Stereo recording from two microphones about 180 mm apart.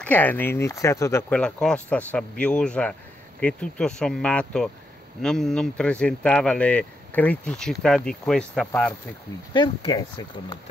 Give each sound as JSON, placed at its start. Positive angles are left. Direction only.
{"t": 0.0, "sound": "speech", "side_deg": 10}
{"t": 1.4, "sound": "speech", "side_deg": 5}
{"t": 9.5, "sound": "speech", "side_deg": 25}